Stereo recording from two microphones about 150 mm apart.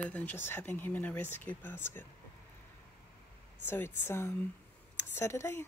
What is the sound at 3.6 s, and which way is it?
A woman's voice, 15° left (ahead or behind).